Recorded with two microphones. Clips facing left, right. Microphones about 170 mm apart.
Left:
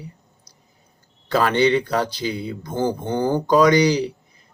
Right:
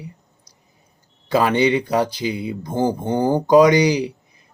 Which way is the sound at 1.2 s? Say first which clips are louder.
Right 1 dB; 10° right (ahead or behind).